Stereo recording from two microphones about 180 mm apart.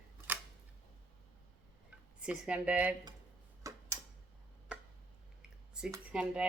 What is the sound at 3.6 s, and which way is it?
Tick-tock, 20° right (ahead or behind).